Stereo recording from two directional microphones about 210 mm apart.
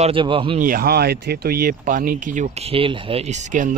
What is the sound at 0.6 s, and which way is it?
Speech, 45° right (ahead or behind).